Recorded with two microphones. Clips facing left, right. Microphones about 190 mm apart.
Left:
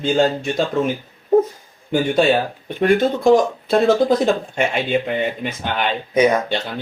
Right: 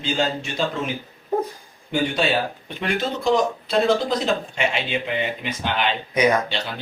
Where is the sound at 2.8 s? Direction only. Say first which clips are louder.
Left 9 dB; 50° left (ahead or behind).